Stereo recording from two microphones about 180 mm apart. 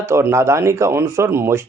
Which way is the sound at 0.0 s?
15° right (ahead or behind).